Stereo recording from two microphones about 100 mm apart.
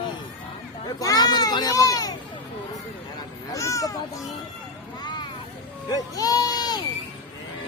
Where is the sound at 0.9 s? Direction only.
40° left (ahead or behind).